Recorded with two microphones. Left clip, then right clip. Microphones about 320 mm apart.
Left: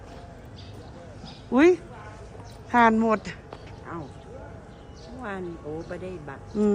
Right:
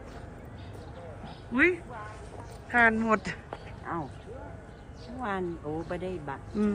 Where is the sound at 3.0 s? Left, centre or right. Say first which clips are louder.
Left 3 dB; centre.